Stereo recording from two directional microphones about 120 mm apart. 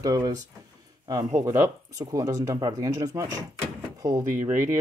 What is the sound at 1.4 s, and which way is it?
Speech, 25° right (ahead or behind).